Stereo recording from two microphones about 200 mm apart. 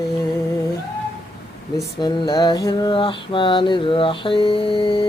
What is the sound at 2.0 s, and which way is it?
Mantra, 20° left (ahead or behind).